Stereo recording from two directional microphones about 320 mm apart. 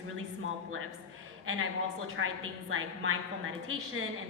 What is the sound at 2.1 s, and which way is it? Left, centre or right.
A woman's voice, right.